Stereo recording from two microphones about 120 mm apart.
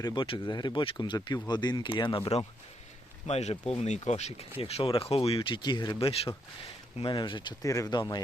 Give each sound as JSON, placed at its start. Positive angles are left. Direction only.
{"t": 0.0, "sound": "speech", "side_deg": 40}
{"t": 3.2, "sound": "speech", "side_deg": 60}
{"t": 4.6, "sound": "speech", "side_deg": 50}
{"t": 7.6, "sound": "speech", "side_deg": 30}